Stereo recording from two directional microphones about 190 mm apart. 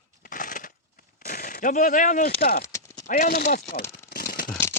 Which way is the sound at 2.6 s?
15° left (ahead or behind).